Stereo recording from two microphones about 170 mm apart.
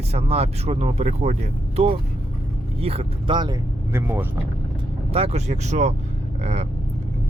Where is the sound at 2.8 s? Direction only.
35° right (ahead or behind).